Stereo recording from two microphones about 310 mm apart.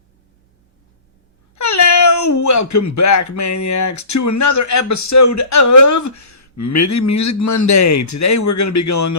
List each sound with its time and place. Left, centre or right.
1.5 s speech: left